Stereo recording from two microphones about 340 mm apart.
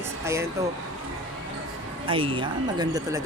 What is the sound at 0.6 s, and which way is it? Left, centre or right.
Speech, centre.